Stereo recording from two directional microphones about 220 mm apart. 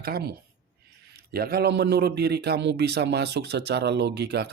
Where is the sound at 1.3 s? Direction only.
45° right (ahead or behind).